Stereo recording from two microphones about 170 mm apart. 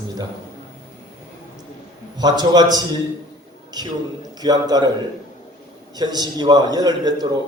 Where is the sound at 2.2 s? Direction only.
25° right (ahead or behind).